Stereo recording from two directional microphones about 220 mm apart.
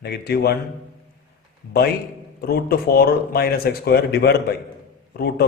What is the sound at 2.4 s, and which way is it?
Speech, 45° left (ahead or behind).